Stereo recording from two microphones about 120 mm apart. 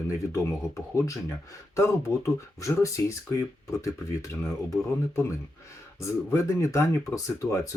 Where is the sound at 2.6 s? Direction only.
25° left (ahead or behind).